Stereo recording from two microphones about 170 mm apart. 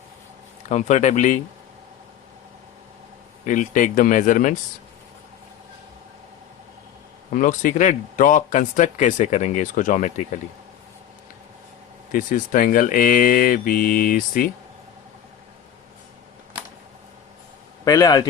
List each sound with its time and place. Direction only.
0.7 s a man's voice: 45° left (ahead or behind)
3.4 s a man's voice: 50° left (ahead or behind)
7.3 s a man's voice: 50° left (ahead or behind)
12.1 s a man's voice: 55° left (ahead or behind)
17.8 s a man's voice: 20° left (ahead or behind)